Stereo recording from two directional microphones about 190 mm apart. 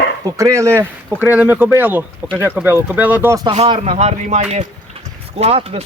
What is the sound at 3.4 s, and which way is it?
Speech, 30° right (ahead or behind).